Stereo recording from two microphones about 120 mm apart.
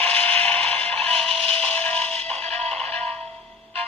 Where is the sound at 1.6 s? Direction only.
15° left (ahead or behind).